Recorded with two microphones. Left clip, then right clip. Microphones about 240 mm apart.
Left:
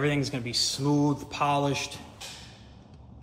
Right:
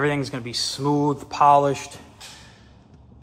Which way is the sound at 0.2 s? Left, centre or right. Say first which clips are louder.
Right 2 dB; right.